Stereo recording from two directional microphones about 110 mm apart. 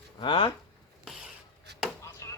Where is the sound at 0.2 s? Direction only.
55° left (ahead or behind).